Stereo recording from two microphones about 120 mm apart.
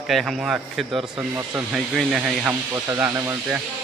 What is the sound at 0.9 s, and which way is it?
Speech, 25° right (ahead or behind).